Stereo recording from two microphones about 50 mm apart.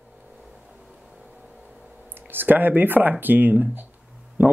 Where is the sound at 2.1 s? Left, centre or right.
Right.